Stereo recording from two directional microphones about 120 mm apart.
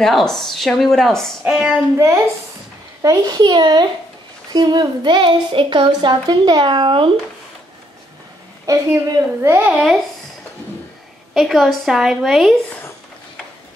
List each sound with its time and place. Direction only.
0.0 s speech: 5° left (ahead or behind)
1.4 s a sound: 5° right (ahead or behind)
2.0 s a woman's voice: 25° right (ahead or behind); by 7.1 s 45° right (ahead or behind)
8.6 s a woman's voice: 25° right (ahead or behind)
11.3 s speech: centre (ahead or behind)